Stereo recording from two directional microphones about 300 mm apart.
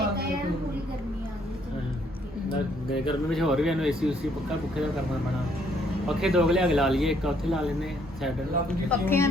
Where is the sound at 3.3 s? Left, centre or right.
Centre.